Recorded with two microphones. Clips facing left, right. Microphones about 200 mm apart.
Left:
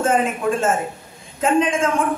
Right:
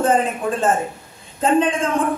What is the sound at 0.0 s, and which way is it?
A woman's voice, 35° right (ahead or behind).